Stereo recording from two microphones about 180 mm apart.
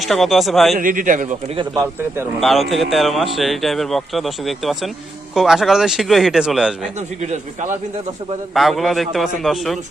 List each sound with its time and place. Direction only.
0.0 s speech: centre (ahead or behind)
0.8 s a man's voice: 50° right (ahead or behind)
2.4 s speech: centre (ahead or behind)
7.2 s a man's voice: 45° right (ahead or behind)
8.5 s speech: centre (ahead or behind)